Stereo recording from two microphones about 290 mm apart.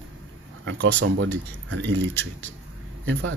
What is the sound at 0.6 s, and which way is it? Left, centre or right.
Speech, right.